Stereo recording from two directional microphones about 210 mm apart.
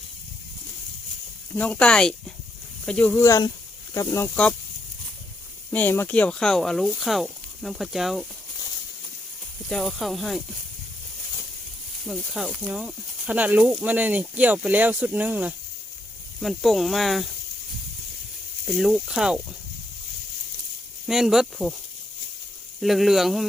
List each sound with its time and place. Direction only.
1.5 s speech: 5° left (ahead or behind)
3.2 s speech: 15° left (ahead or behind)
5.7 s speech: 10° left (ahead or behind)
9.6 s speech: centre (ahead or behind)
12.0 s speech: centre (ahead or behind)
18.6 s speech: centre (ahead or behind)
21.1 s speech: centre (ahead or behind)
22.8 s speech: centre (ahead or behind)